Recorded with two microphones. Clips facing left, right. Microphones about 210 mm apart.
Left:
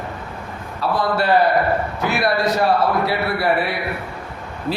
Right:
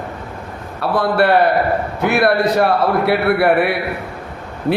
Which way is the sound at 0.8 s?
60° right (ahead or behind).